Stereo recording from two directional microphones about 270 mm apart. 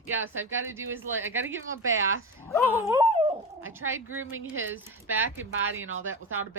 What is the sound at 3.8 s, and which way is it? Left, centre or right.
Speech, right.